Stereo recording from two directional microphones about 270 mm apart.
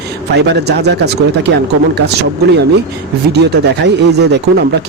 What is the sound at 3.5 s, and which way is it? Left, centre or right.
Speech, right.